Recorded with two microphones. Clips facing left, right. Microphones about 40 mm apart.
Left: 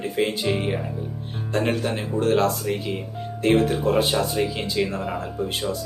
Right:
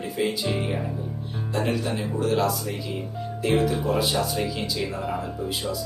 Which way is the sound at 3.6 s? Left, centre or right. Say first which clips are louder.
Left 3 dB; left.